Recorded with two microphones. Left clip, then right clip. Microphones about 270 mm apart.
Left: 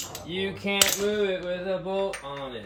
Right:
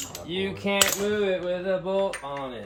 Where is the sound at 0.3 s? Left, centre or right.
Centre.